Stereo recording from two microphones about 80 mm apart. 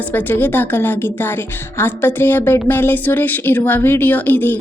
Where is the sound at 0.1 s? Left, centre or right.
Left.